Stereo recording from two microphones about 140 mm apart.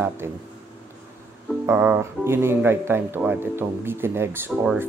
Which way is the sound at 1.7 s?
15° right (ahead or behind).